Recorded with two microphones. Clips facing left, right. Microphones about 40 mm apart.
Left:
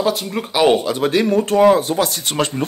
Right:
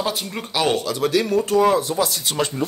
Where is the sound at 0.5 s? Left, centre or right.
Left.